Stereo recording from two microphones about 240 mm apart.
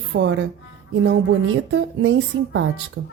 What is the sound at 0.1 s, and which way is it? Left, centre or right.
Speech, right.